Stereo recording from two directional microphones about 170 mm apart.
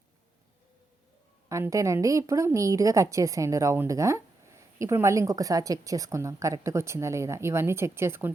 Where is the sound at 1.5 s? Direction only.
20° right (ahead or behind).